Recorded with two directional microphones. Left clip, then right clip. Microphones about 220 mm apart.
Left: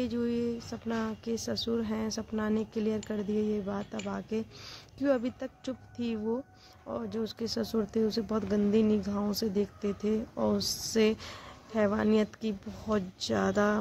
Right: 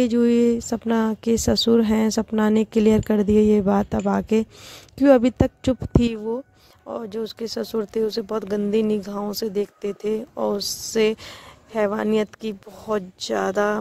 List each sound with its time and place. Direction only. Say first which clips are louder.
0.0 s a woman's voice: right 14 dB; 40° right (ahead or behind)